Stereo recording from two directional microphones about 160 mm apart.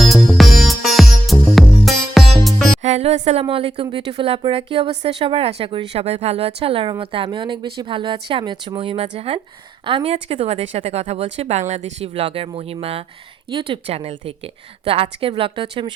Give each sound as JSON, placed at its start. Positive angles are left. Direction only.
{"t": 0.0, "sound": "music", "side_deg": 0}
{"t": 2.8, "sound": "music", "side_deg": -45}
{"t": 3.4, "sound": "a woman's voice", "side_deg": -35}